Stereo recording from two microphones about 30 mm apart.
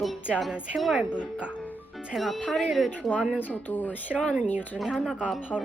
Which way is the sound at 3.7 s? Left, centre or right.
Left.